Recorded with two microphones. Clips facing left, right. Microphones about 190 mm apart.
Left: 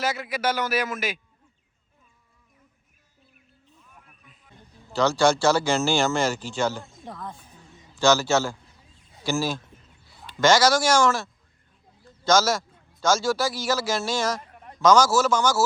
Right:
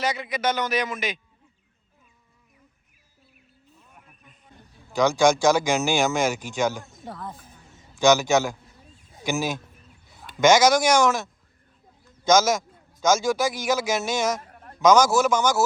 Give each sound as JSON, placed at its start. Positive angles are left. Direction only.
{"t": 0.0, "sound": "a man's voice", "side_deg": 5}
{"t": 4.9, "sound": "speech", "side_deg": -15}
{"t": 7.0, "sound": "speech", "side_deg": -5}
{"t": 7.9, "sound": "a man's voice", "side_deg": -15}
{"t": 12.3, "sound": "speech", "side_deg": -20}